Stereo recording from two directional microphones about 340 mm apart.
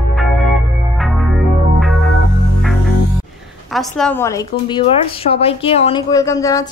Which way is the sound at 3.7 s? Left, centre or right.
Centre.